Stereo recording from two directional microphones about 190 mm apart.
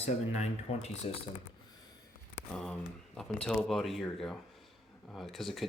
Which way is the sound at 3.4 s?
Centre (ahead or behind).